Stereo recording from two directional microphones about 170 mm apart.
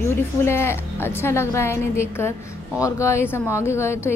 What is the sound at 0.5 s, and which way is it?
A woman's voice, 15° left (ahead or behind).